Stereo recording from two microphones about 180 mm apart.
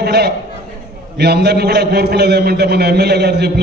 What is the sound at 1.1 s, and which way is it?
A man's voice, 65° right (ahead or behind).